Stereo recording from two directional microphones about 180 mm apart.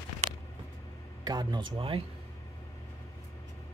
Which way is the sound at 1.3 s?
25° right (ahead or behind).